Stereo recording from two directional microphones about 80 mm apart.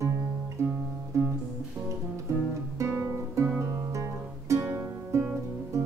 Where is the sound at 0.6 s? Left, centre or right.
Right.